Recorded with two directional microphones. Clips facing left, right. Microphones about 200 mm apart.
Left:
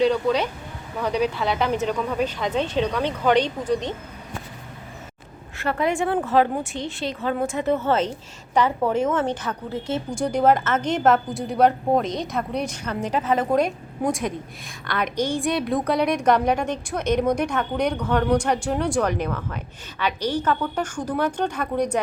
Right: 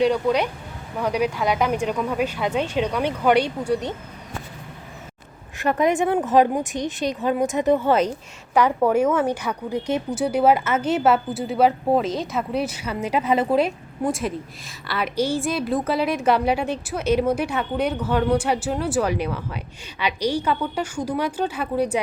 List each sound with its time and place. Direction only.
0.0 s speech: 10° right (ahead or behind)
5.5 s a woman's voice: 20° right (ahead or behind)